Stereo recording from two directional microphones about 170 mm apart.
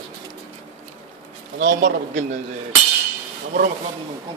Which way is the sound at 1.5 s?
55° right (ahead or behind).